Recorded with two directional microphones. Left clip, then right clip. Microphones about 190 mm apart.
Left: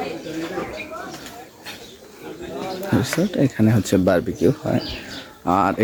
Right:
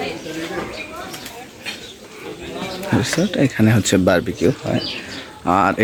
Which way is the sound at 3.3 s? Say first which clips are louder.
Right 3 dB; 5° left (ahead or behind).